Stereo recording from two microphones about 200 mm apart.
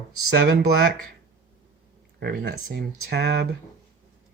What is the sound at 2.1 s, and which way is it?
Speech, 55° right (ahead or behind).